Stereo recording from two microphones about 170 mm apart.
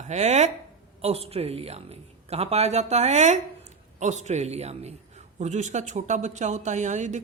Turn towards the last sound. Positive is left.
turn(degrees=-45)  # may be behind; listen again after turning